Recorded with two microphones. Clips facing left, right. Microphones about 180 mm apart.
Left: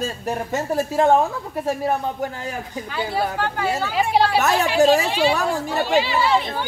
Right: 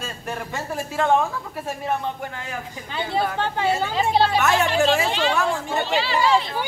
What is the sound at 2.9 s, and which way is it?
Speech, 25° right (ahead or behind).